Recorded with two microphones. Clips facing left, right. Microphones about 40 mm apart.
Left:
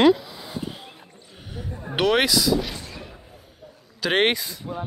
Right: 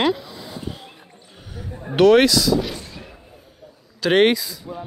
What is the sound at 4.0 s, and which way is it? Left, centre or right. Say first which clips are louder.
Speech: right 5 dB; centre.